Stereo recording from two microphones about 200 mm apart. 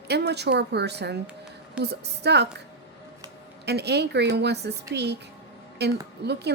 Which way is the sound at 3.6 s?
55° right (ahead or behind).